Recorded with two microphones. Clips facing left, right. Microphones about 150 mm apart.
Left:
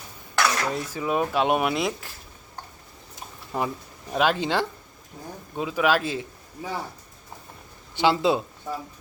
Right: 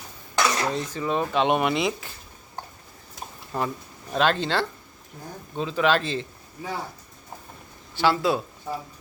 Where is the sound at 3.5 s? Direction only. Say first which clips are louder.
Even; 10° left (ahead or behind).